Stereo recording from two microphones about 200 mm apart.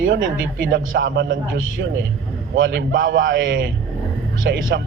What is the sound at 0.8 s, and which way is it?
A man's voice, 75° right (ahead or behind).